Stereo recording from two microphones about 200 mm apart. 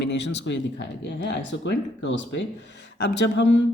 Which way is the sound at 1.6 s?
65° left (ahead or behind).